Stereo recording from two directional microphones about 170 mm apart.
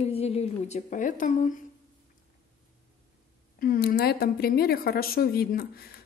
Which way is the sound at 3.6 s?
60° left (ahead or behind).